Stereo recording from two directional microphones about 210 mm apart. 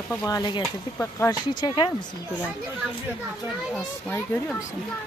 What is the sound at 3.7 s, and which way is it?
Speech, 10° left (ahead or behind).